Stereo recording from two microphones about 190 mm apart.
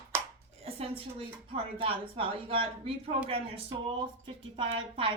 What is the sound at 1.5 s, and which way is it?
A woman's voice, 30° right (ahead or behind).